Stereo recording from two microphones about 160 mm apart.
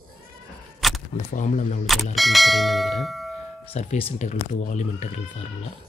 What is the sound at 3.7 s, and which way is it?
Speech, 45° left (ahead or behind).